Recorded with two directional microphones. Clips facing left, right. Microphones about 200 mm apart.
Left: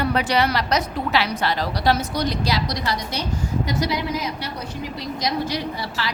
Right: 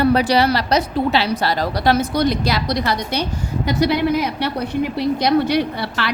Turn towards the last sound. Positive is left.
turn(degrees=-65)  # may be behind; listen again after turning